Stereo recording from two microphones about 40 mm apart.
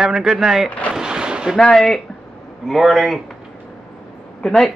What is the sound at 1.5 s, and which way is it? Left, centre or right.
Speech, centre.